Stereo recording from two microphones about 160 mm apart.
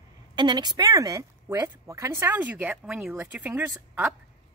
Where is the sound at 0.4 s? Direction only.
30° right (ahead or behind).